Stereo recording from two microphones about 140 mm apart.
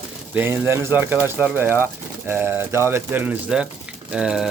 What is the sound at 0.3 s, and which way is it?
Speech, 15° right (ahead or behind).